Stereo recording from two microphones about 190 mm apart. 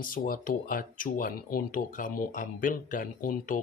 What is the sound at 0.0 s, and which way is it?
Speech, 45° left (ahead or behind).